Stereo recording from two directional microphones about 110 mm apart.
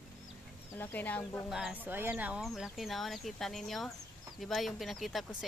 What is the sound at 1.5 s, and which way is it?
Speech, 5° right (ahead or behind).